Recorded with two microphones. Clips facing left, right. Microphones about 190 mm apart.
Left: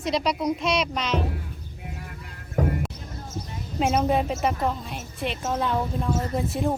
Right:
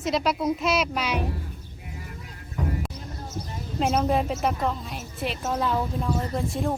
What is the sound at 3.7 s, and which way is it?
A woman's voice, 5° left (ahead or behind).